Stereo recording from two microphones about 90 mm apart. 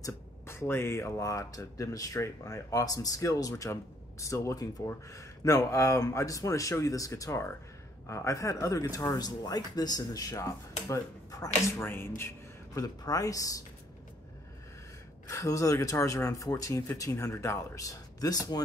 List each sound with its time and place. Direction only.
0.0 s speech: 30° left (ahead or behind)
11.8 s speech: 25° left (ahead or behind)
12.7 s speech: 40° left (ahead or behind)
15.2 s speech: 35° left (ahead or behind)